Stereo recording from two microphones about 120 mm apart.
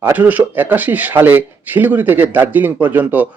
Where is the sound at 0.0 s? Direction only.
15° right (ahead or behind).